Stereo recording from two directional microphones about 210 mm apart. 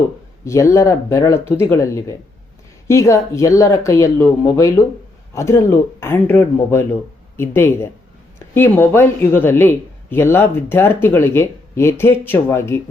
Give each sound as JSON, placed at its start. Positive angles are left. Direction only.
{"t": 0.4, "sound": "speech", "side_deg": 15}